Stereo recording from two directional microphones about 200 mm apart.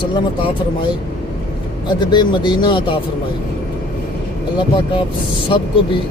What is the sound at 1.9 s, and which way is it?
Speech, 20° left (ahead or behind).